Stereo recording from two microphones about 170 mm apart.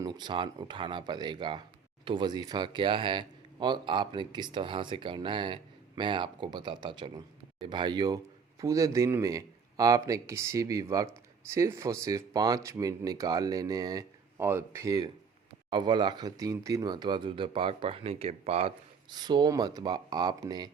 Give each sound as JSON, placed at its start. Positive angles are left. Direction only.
{"t": 0.0, "sound": "speech", "side_deg": -25}
{"t": 19.1, "sound": "speech", "side_deg": -25}